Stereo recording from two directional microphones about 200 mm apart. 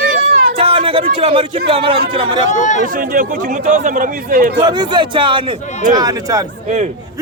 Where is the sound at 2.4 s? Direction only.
35° left (ahead or behind).